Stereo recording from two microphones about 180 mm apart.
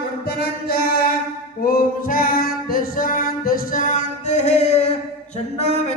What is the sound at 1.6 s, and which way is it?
Female singing, 50° left (ahead or behind).